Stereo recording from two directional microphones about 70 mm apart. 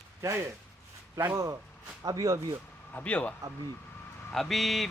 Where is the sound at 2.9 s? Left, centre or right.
Centre.